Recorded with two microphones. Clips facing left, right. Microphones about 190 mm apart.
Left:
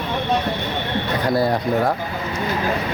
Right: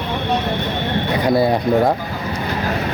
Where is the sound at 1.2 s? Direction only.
15° right (ahead or behind).